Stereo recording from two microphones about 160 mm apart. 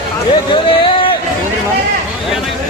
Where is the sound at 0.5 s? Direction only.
30° left (ahead or behind).